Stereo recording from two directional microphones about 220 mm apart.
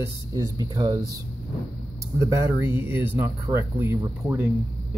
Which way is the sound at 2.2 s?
15° right (ahead or behind).